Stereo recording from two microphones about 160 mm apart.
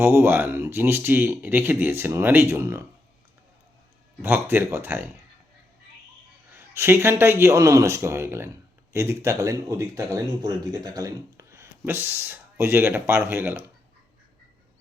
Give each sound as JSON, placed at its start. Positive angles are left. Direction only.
{"t": 0.0, "sound": "speech", "side_deg": -15}
{"t": 4.2, "sound": "speech", "side_deg": -15}
{"t": 6.5, "sound": "speech", "side_deg": -15}